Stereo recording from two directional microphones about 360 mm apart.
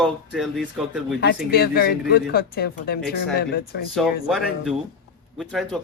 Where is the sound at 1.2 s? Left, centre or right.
Left.